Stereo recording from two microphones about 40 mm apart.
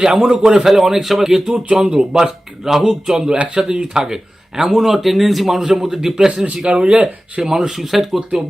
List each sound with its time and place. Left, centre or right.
0.0 s speech: centre
3.3 s speech: right
3.7 s speech: right
4.0 s speech: centre
6.7 s speech: right
7.4 s speech: centre